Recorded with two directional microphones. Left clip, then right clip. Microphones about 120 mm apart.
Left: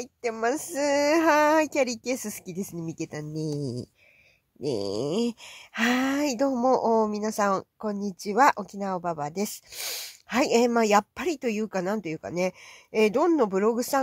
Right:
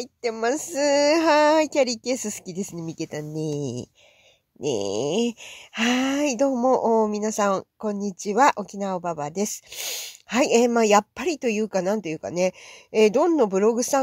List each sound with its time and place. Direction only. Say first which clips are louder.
0.2 s speech: right 2 dB; 20° right (ahead or behind)
3.5 s speech: right 4 dB; 30° left (ahead or behind)
4.8 s speech: right 4 dB; 15° right (ahead or behind)